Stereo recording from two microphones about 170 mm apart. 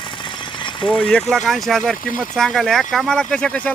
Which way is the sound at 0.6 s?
30° left (ahead or behind).